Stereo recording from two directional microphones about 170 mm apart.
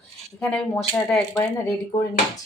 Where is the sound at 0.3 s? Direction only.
5° left (ahead or behind).